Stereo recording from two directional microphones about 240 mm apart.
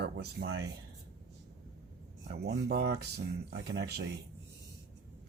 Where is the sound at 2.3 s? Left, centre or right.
Right.